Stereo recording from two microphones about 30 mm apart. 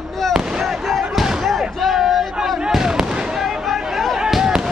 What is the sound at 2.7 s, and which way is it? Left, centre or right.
Fireworks, centre.